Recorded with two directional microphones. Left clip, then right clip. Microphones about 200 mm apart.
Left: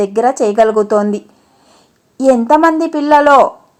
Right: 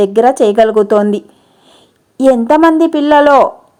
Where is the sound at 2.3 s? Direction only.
30° right (ahead or behind).